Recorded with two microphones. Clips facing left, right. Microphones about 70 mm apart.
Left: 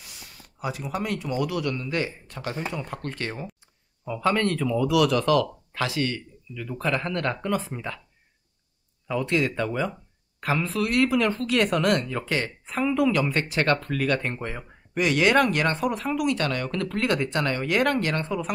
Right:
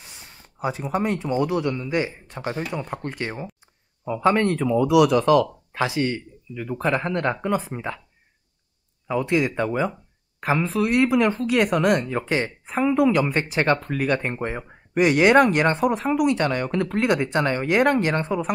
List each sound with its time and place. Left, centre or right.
0.0 s speech: right
9.0 s speech: centre